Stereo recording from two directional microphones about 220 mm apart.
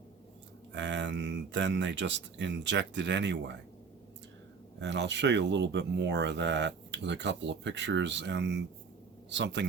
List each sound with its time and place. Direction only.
0.7 s speech: 55° right (ahead or behind)
4.8 s speech: 55° right (ahead or behind)